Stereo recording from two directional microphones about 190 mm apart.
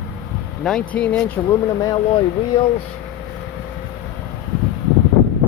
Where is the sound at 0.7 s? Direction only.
5° left (ahead or behind).